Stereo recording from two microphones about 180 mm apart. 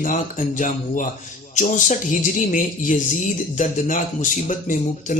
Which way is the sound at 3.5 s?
45° left (ahead or behind).